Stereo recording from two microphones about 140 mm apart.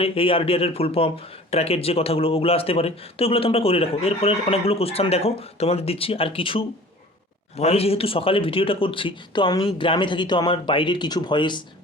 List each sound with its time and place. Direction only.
0.0 s a man's voice: 40° left (ahead or behind)